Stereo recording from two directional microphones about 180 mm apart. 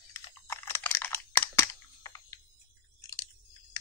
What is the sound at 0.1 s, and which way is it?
Crunch, 15° left (ahead or behind).